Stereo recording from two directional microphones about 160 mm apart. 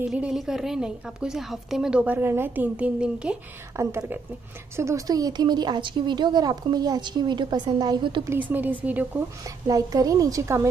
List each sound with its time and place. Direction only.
0.1 s a woman's voice: 5° right (ahead or behind)
3.7 s a woman's voice: 15° right (ahead or behind)
8.3 s speech: 10° right (ahead or behind)
9.4 s a woman's voice: 20° right (ahead or behind)